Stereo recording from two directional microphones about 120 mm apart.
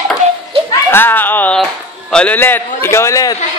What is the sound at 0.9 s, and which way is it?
Speech, 15° left (ahead or behind).